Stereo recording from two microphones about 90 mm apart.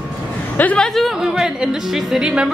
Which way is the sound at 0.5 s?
20° left (ahead or behind).